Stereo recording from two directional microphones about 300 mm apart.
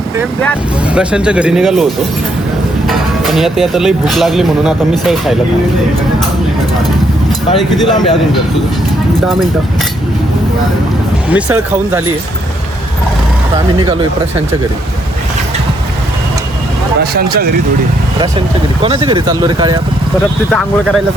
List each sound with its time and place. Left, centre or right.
0.9 s speech: centre
7.9 s speech: centre
11.3 s speech: centre
17.0 s speech: right
18.2 s speech: centre
20.5 s speech: centre